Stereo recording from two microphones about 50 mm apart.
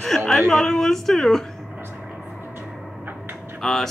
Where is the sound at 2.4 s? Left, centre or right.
Right.